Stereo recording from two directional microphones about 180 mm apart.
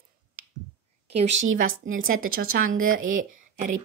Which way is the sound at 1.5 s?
50° right (ahead or behind).